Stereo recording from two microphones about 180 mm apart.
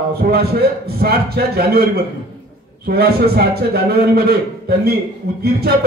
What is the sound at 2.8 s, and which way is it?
A man's voice, 60° right (ahead or behind).